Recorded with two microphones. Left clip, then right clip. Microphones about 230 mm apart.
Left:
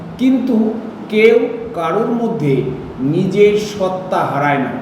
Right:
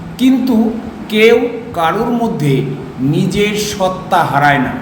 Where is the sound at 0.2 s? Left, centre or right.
Right.